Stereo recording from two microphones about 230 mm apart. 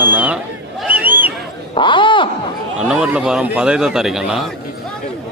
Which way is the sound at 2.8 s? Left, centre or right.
Centre.